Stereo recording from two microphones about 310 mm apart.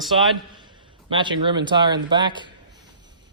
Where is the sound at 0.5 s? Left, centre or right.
Centre.